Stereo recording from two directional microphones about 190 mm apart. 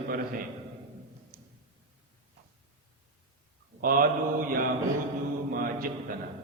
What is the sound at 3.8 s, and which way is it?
Speech, 50° right (ahead or behind).